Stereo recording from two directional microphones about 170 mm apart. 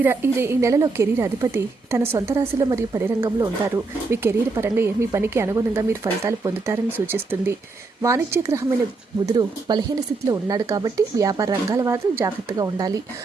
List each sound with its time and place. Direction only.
0.0 s a woman's voice: 15° right (ahead or behind)